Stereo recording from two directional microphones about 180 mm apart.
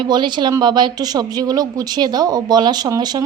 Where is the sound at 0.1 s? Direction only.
25° right (ahead or behind).